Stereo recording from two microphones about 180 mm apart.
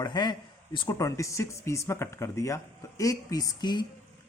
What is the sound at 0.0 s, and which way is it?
Speech, 25° left (ahead or behind).